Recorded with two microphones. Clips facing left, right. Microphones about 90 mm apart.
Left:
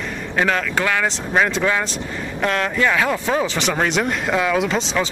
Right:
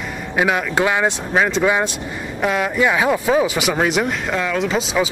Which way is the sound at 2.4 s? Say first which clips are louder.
Right 2 dB; 10° right (ahead or behind).